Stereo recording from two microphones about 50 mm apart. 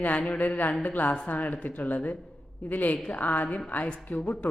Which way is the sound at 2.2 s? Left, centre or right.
Centre.